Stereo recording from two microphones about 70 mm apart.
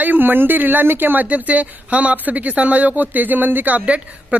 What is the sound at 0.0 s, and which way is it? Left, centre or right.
A man's voice, right.